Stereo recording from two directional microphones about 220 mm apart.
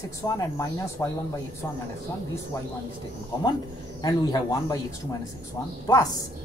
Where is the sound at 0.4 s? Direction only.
15° left (ahead or behind).